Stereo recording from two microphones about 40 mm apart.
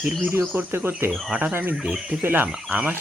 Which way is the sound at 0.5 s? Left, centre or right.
Right.